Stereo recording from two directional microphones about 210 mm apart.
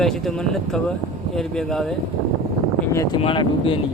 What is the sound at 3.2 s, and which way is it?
Speech, 25° left (ahead or behind).